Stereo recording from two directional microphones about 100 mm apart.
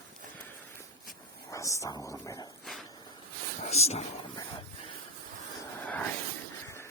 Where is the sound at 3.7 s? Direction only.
90° left.